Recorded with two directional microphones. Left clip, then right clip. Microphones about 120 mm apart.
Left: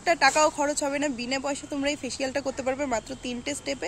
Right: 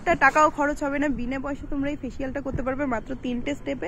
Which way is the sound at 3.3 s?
5° left (ahead or behind).